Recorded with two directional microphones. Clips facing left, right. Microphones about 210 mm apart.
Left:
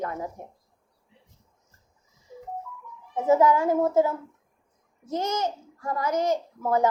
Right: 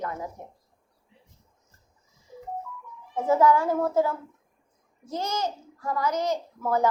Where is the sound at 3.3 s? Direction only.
20° left (ahead or behind).